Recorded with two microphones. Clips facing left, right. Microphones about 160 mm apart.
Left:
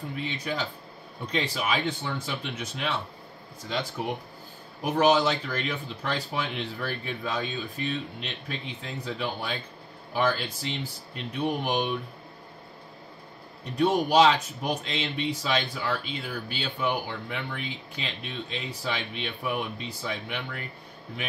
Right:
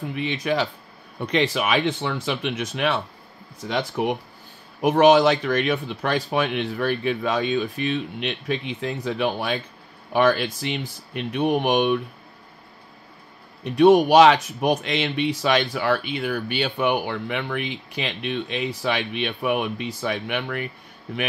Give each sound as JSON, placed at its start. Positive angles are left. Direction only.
{"t": 0.1, "sound": "speech", "side_deg": -75}
{"t": 13.7, "sound": "speech", "side_deg": -90}